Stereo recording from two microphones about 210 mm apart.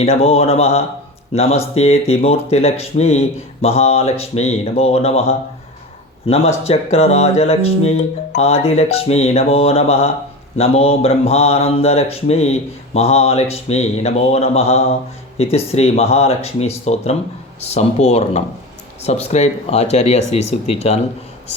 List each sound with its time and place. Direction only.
0.0 s mantra: 30° left (ahead or behind)
6.7 s speech: 30° left (ahead or behind)
8.4 s mantra: 30° left (ahead or behind)
14.0 s speech: 30° left (ahead or behind)
15.4 s mantra: 30° left (ahead or behind)
17.6 s speech: 30° left (ahead or behind)